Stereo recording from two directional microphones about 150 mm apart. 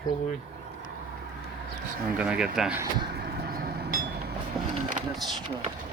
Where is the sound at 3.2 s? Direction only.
90° right.